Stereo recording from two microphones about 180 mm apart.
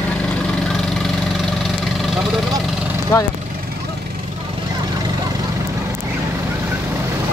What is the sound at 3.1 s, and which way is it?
Speech, 15° left (ahead or behind).